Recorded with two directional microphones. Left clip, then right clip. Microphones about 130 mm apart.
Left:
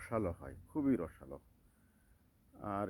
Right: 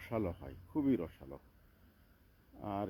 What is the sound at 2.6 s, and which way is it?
Speech, 5° right (ahead or behind).